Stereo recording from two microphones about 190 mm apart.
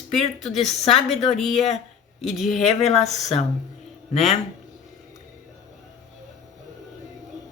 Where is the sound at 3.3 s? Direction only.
30° left (ahead or behind).